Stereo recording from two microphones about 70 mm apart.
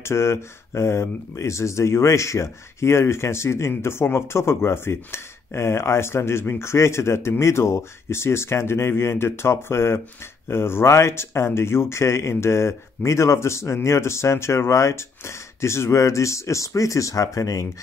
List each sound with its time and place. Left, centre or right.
0.0 s speech: left